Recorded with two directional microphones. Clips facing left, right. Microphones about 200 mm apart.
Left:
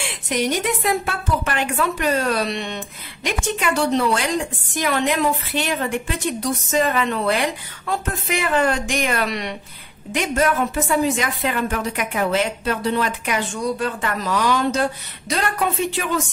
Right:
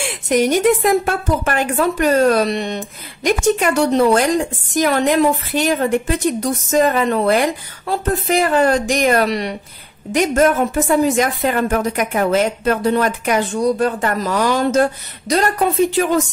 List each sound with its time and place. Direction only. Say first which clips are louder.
0.0 s a woman's voice: right 7 dB; 45° right (ahead or behind)